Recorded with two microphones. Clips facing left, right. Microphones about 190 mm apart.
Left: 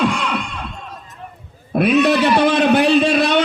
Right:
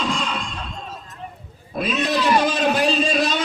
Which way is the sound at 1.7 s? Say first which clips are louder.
Left 8 dB; 65° left (ahead or behind).